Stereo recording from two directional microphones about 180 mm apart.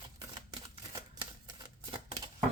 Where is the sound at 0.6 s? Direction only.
25° right (ahead or behind).